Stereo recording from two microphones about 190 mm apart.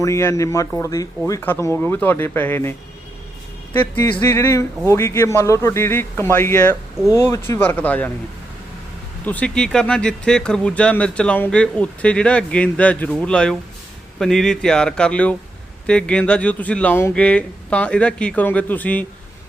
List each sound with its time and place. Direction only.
0.0 s speech: 15° left (ahead or behind)
6.9 s speech: 5° right (ahead or behind)
7.3 s speech: 15° left (ahead or behind)
9.2 s speech: 5° left (ahead or behind)